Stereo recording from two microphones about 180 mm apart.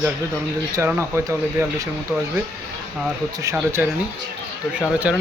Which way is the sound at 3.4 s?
15° right (ahead or behind).